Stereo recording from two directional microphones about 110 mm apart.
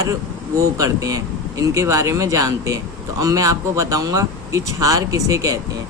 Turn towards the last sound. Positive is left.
turn(degrees=-30)  # may be behind; listen again after turning